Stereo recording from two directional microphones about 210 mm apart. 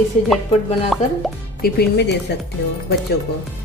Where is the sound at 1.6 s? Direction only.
50° left (ahead or behind).